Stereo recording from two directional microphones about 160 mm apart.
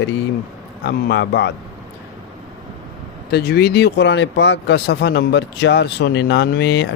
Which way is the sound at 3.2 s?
85° left.